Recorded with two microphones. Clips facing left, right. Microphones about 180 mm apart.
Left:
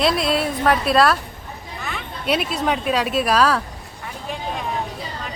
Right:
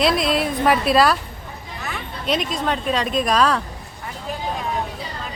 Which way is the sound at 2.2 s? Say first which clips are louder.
Left 1 dB; 10° left (ahead or behind).